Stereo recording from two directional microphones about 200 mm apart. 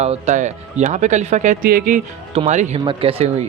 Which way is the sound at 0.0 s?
35° right (ahead or behind).